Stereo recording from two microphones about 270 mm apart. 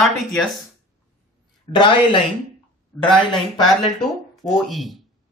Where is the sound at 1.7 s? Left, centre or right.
Centre.